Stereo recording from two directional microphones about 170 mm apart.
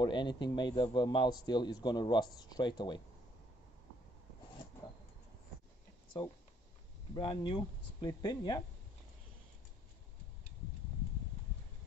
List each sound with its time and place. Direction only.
0.0 s speech: 25° left (ahead or behind)
7.2 s speech: 30° left (ahead or behind)